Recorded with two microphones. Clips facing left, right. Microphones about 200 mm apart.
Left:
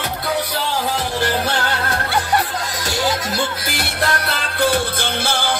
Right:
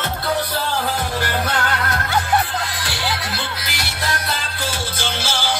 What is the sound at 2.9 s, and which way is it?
Music, 45° left (ahead or behind).